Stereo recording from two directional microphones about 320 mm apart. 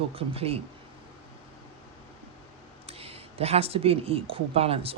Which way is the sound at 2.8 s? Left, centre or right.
Centre.